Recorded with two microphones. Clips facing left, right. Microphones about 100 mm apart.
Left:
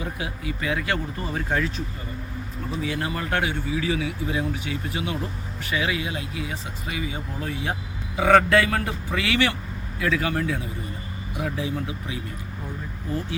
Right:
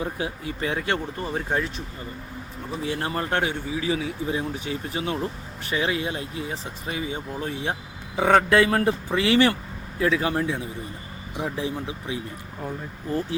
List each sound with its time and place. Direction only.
0.0 s speech: 35° right (ahead or behind)
2.8 s speech: 35° right (ahead or behind)